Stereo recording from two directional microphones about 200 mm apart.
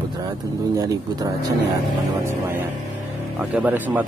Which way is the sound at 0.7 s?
15° right (ahead or behind).